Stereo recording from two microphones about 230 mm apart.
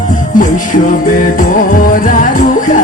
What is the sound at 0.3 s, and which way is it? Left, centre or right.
Music, left.